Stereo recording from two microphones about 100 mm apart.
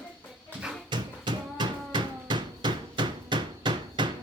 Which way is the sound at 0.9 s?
50° right (ahead or behind).